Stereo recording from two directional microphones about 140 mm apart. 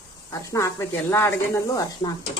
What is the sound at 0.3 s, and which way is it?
Speech, 20° left (ahead or behind).